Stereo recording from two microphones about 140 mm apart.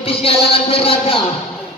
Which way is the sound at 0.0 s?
45° left (ahead or behind).